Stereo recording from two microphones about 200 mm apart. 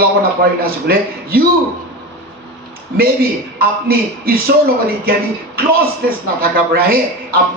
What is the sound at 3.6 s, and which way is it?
Speech, 50° right (ahead or behind).